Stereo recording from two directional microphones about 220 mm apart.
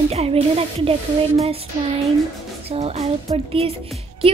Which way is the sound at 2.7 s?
30° right (ahead or behind).